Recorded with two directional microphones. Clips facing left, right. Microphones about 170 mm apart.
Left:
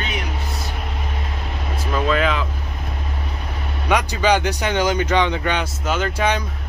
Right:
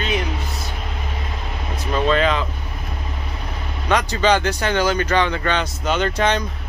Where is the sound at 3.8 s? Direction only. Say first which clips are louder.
Right 1 dB; 10° left (ahead or behind).